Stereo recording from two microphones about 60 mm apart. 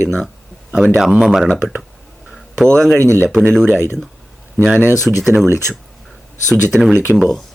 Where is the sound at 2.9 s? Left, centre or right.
Right.